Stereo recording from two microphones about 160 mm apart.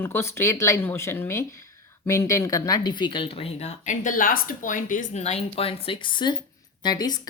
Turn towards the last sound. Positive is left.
turn(degrees=25)  # may be behind; listen again after turning